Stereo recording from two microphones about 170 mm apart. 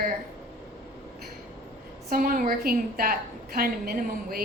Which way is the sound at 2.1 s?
55° right (ahead or behind).